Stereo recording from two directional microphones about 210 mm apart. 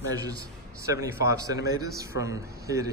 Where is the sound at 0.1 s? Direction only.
15° right (ahead or behind).